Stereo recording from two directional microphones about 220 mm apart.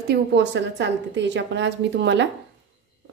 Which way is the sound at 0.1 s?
50° right (ahead or behind).